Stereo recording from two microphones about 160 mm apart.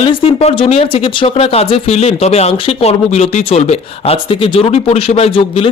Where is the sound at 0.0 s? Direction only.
35° left (ahead or behind).